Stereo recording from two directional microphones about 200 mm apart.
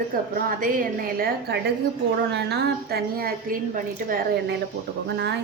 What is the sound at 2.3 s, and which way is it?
A woman's voice, 55° right (ahead or behind).